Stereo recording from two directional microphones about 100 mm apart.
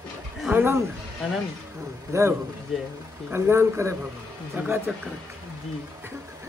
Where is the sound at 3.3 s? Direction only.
25° right (ahead or behind).